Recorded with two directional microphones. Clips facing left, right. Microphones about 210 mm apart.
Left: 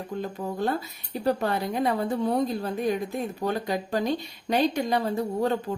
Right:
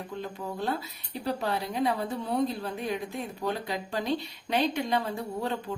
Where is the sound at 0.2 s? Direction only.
45° left (ahead or behind).